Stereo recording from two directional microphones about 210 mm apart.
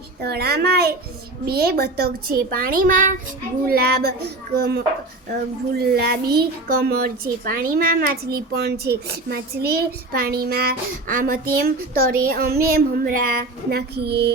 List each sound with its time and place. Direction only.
0.2 s a child's voice: 50° right (ahead or behind)
5.7 s a child's voice: 45° right (ahead or behind)